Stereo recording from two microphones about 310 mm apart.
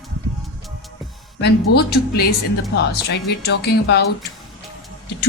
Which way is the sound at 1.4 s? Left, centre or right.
Left.